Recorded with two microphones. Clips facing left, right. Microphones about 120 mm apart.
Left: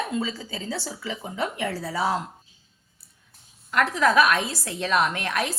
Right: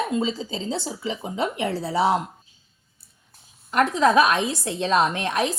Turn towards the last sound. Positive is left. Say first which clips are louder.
# right 3 dB
turn(degrees=-20)  # may be behind; listen again after turning